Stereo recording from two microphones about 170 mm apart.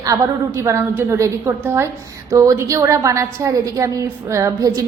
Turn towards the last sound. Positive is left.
turn(degrees=-20)  # may be behind; listen again after turning